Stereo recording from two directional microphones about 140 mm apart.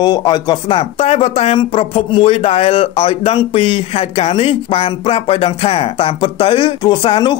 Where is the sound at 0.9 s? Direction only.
50° left (ahead or behind).